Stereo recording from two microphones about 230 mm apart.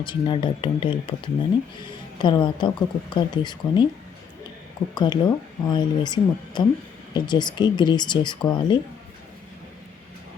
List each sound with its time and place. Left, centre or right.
0.0 s speech: left
4.9 s speech: centre